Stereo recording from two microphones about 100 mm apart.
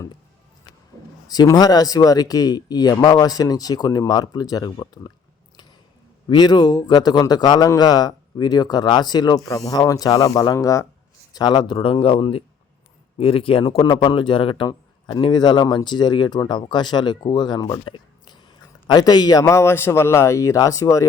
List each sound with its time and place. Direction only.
1.5 s a man's voice: 40° left (ahead or behind)
6.2 s a man's voice: 45° left (ahead or behind)